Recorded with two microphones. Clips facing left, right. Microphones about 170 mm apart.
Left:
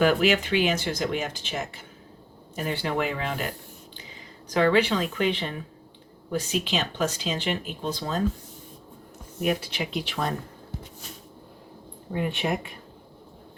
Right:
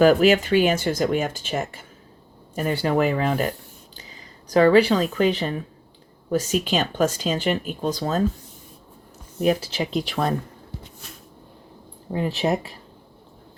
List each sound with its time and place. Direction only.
0.0 s speech: 40° right (ahead or behind)
9.4 s speech: 35° right (ahead or behind)
12.1 s speech: 35° right (ahead or behind)